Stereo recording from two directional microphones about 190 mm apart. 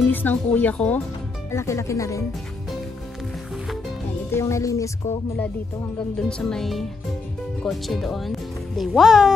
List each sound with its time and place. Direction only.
0.1 s speech: 10° left (ahead or behind)
4.3 s speech: 15° left (ahead or behind)
6.1 s speech: 5° left (ahead or behind)